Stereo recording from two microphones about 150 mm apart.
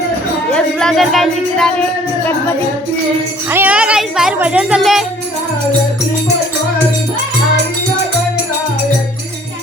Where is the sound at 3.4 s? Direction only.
15° right (ahead or behind).